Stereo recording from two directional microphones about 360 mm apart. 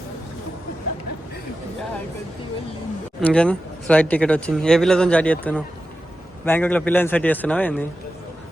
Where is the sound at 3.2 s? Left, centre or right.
Centre.